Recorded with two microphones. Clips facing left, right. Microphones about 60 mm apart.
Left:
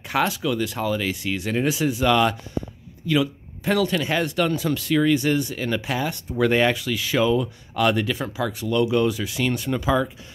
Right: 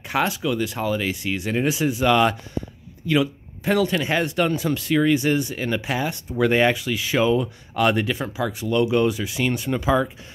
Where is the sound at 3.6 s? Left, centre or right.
Centre.